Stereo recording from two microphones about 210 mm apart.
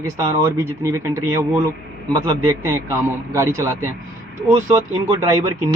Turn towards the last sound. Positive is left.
turn(degrees=-15)  # may be behind; listen again after turning